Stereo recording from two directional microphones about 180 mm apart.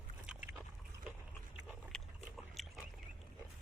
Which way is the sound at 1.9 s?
Centre (ahead or behind).